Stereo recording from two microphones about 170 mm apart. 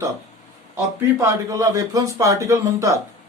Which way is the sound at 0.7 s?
15° right (ahead or behind).